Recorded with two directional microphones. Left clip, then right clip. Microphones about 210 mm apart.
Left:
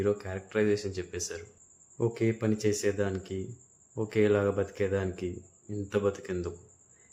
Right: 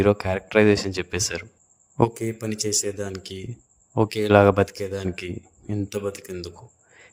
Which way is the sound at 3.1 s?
45° right (ahead or behind).